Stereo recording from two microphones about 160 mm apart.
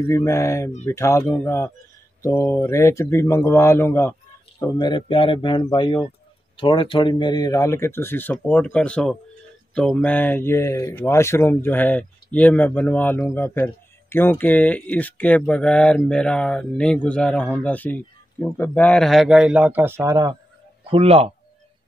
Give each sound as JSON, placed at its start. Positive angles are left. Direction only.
{"t": 0.0, "sound": "a man's voice", "side_deg": 15}
{"t": 20.9, "sound": "a man's voice", "side_deg": -40}